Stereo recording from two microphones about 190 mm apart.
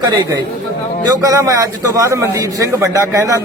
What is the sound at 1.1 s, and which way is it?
A man's voice, 15° right (ahead or behind).